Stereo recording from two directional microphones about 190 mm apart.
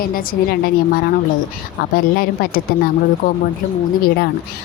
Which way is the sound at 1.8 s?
50° left (ahead or behind).